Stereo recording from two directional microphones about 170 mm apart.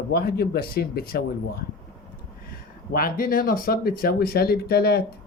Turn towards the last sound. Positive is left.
turn(degrees=70)  # may be behind; listen again after turning